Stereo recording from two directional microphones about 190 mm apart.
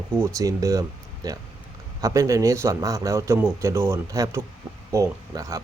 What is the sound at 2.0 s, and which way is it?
Speech, 15° right (ahead or behind).